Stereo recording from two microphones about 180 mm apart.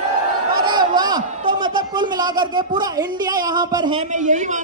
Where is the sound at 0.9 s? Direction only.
25° right (ahead or behind).